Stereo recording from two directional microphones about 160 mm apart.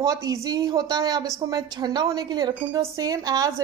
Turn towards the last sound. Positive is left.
turn(degrees=-20)  # may be behind; listen again after turning